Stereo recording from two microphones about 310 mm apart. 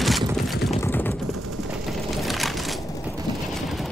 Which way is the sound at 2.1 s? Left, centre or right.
Centre.